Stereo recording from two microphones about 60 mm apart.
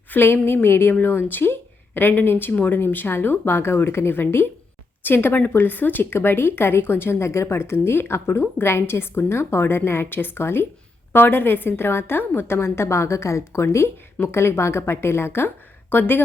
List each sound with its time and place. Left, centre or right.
0.1 s a woman's voice: left